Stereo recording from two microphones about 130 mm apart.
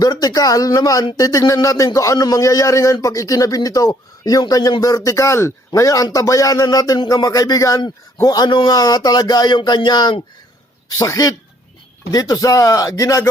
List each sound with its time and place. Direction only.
0.0 s speech: 30° left (ahead or behind)